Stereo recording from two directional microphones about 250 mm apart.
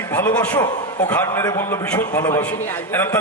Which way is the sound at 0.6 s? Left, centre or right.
Left.